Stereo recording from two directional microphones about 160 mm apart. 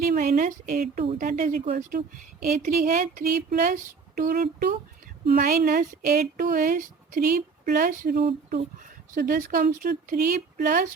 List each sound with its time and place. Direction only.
0.0 s a woman's voice: 50° right (ahead or behind)
5.2 s speech: 70° right (ahead or behind)
5.6 s speech: 60° right (ahead or behind)